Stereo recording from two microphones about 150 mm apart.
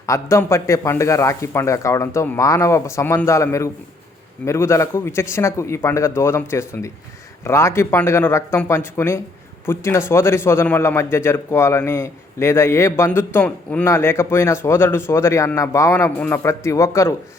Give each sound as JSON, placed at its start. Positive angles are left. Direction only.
{"t": 0.0, "sound": "a man's voice", "side_deg": 20}